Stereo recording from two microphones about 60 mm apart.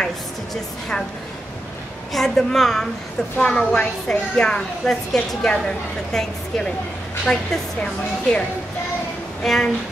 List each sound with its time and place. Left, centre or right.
2.1 s a woman's voice: centre